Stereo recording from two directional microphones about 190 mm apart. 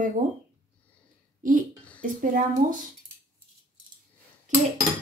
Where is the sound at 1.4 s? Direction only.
45° right (ahead or behind).